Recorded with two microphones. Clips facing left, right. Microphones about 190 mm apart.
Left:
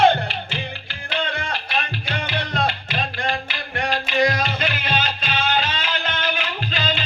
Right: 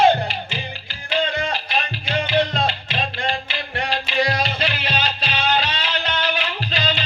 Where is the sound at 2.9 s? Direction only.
25° right (ahead or behind).